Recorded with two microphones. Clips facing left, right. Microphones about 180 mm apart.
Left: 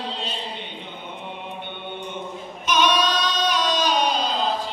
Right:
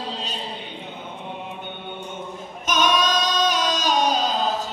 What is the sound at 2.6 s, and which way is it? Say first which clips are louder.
Child singing: even; 45° right (ahead or behind).